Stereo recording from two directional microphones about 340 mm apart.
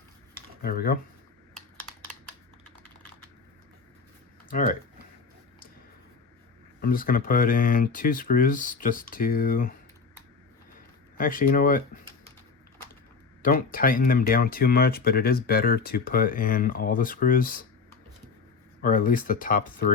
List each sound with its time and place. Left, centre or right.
0.6 s speech: left
4.4 s speech: left
6.8 s speech: left
11.2 s speech: left
13.4 s speech: left
18.8 s speech: left